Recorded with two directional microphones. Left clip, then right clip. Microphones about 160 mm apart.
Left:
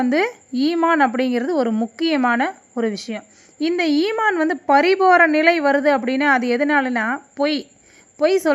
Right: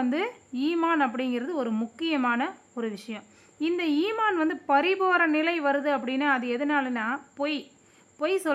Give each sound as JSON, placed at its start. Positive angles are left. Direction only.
{"t": 0.1, "sound": "a woman's voice", "side_deg": 30}